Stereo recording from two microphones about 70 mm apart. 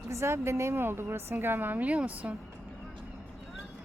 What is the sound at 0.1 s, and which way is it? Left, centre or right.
A woman's voice, right.